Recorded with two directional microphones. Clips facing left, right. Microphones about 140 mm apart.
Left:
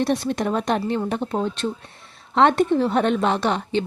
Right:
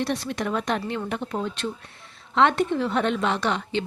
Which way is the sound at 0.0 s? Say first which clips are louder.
Left 5 dB; 40° left (ahead or behind).